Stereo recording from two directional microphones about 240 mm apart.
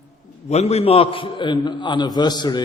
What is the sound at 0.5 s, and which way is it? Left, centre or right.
A man's voice, left.